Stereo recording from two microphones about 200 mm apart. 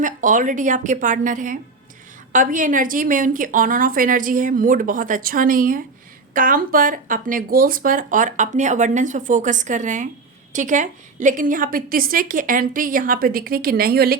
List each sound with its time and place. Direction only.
0.0 s a woman's voice: 40° right (ahead or behind)